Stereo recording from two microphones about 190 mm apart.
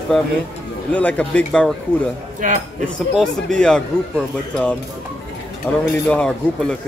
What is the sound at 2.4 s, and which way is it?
Speech, 45° right (ahead or behind).